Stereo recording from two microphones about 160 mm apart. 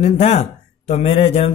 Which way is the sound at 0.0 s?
40° left (ahead or behind).